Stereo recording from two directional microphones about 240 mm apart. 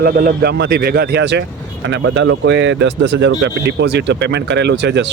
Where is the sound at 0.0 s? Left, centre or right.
Right.